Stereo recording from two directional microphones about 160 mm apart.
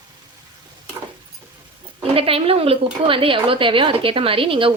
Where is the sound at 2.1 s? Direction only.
35° right (ahead or behind).